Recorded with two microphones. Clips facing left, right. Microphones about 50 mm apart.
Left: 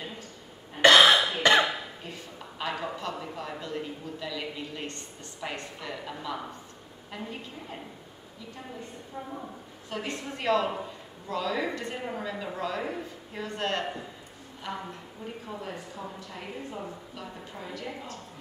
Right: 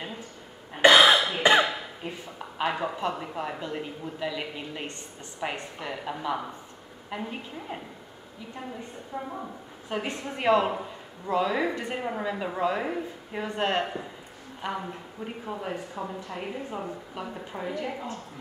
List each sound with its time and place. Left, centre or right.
0.7 s cough: centre
2.6 s a woman's voice: right
9.1 s a woman's voice: right